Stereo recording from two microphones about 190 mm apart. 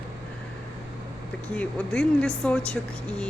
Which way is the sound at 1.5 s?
5° left (ahead or behind).